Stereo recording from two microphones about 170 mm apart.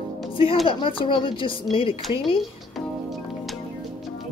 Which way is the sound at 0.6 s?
30° left (ahead or behind).